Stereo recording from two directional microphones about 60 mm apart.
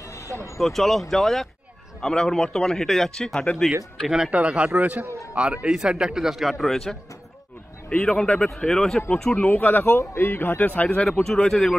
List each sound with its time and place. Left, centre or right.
0.0 s vehicle: left
0.6 s a man's voice: centre
3.3 s a man's voice: centre
4.0 s a man's voice: centre
9.5 s speech: left
10.6 s speech: left
11.2 s a man's voice: centre